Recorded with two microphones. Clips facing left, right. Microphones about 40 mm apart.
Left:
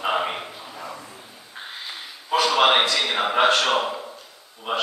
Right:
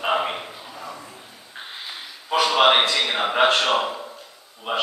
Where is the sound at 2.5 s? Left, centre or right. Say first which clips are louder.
Right 2 dB; centre.